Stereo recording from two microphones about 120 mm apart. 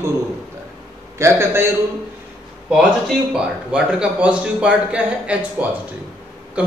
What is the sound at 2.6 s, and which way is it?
A man's voice, 5° right (ahead or behind).